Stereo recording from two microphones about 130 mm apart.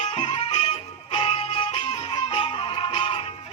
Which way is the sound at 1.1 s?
40° left (ahead or behind).